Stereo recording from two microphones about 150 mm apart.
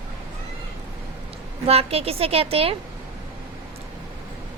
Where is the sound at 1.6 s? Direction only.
40° right (ahead or behind).